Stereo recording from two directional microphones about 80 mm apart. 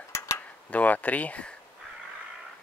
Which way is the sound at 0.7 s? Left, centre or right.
Centre.